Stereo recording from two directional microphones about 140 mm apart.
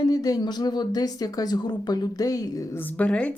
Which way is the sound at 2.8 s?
10° left (ahead or behind).